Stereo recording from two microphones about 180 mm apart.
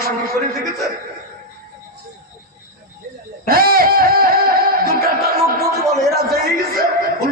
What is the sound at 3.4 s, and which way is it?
Music, 55° right (ahead or behind).